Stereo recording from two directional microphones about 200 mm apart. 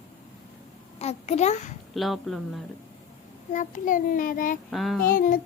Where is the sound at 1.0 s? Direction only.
35° left (ahead or behind).